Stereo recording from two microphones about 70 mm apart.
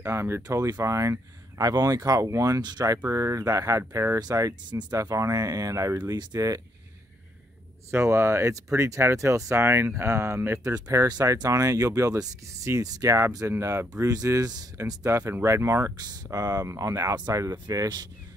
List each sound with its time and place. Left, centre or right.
0.0 s speech: right
0.4 s speech: right
1.6 s speech: right
4.9 s speech: right
7.9 s speech: right
10.7 s speech: right
13.5 s speech: right
14.1 s speech: right
15.0 s speech: right
16.0 s speech: right
16.3 s speech: right